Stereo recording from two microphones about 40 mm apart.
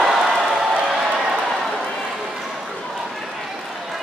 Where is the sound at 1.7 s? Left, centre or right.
Centre.